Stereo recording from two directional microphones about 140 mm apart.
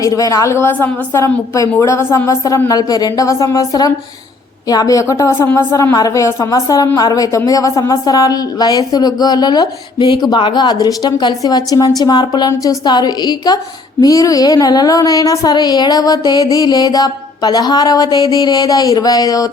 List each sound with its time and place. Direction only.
0.0 s a woman's voice: 25° left (ahead or behind)